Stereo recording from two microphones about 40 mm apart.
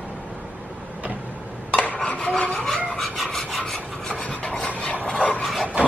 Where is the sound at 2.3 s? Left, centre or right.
Left.